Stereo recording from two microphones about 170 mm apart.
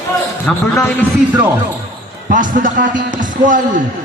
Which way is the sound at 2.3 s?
50° right (ahead or behind).